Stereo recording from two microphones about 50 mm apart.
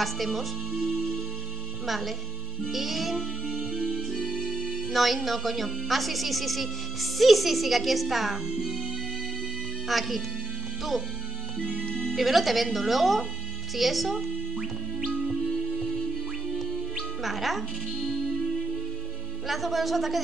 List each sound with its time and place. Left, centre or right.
0.0 s a woman's voice: centre
0.8 s music: centre
1.9 s a woman's voice: centre
4.1 s music: centre
4.6 s a woman's voice: centre
9.8 s a woman's voice: centre
12.1 s a woman's voice: centre
13.7 s music: centre
16.5 s music: centre
19.4 s a woman's voice: centre